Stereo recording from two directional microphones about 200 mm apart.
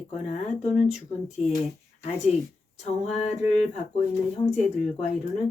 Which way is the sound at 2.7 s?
30° left (ahead or behind).